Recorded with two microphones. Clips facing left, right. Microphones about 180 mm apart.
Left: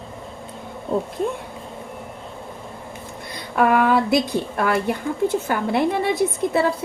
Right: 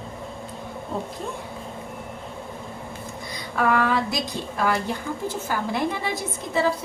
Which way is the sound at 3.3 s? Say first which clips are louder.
Left 4 dB; 60° left (ahead or behind).